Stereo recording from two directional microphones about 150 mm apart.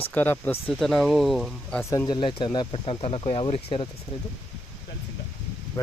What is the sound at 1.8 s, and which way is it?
Speech, 20° left (ahead or behind).